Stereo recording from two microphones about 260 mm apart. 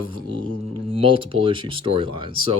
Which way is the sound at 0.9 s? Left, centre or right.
Right.